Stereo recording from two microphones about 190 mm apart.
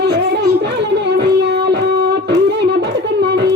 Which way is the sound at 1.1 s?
60° right (ahead or behind).